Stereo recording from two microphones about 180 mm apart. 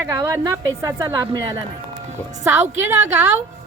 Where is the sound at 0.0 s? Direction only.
15° right (ahead or behind).